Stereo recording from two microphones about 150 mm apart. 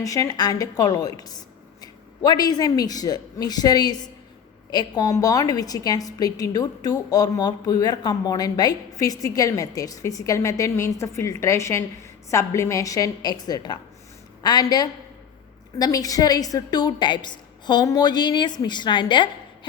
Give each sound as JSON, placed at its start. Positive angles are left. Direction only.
{"t": 0.0, "sound": "a woman's voice", "side_deg": 25}